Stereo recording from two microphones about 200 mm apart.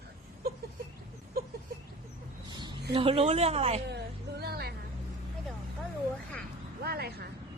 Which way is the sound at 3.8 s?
55° right (ahead or behind).